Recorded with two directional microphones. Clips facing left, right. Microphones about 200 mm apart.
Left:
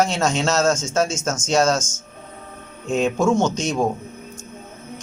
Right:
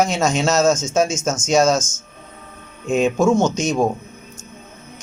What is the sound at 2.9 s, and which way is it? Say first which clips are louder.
Speech: right 3 dB; 10° right (ahead or behind).